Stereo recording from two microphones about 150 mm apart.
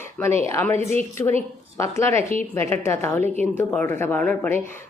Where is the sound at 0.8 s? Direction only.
45° right (ahead or behind).